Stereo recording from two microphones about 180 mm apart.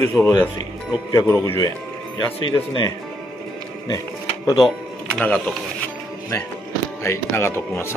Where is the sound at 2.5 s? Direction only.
25° left (ahead or behind).